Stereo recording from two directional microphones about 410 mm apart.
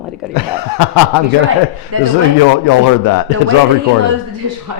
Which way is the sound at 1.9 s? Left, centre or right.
Right.